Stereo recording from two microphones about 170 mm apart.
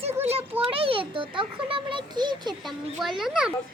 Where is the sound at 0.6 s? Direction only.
30° right (ahead or behind).